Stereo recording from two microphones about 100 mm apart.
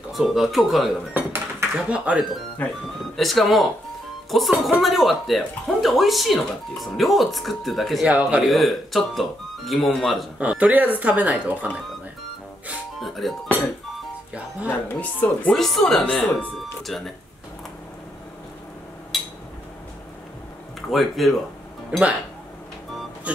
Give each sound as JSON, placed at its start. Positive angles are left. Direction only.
{"t": 0.1, "sound": "speech", "side_deg": 0}
{"t": 1.1, "sound": "a sound", "side_deg": -20}
{"t": 2.6, "sound": "speech", "side_deg": 15}
{"t": 3.2, "sound": "speech", "side_deg": 0}
{"t": 8.1, "sound": "speech", "side_deg": -10}
{"t": 8.5, "sound": "speech", "side_deg": 0}
{"t": 10.4, "sound": "speech", "side_deg": -15}
{"t": 13.0, "sound": "music", "side_deg": 0}
{"t": 14.9, "sound": "speech", "side_deg": 15}
{"t": 15.5, "sound": "speech", "side_deg": 0}
{"t": 19.1, "sound": "a sound", "side_deg": 0}
{"t": 20.9, "sound": "speech", "side_deg": 0}
{"t": 21.9, "sound": "speech", "side_deg": -10}